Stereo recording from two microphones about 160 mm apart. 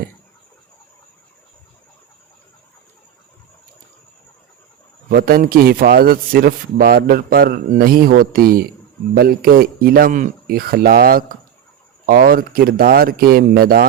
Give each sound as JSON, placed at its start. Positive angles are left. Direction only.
{"t": 5.0, "sound": "a man's voice", "side_deg": -65}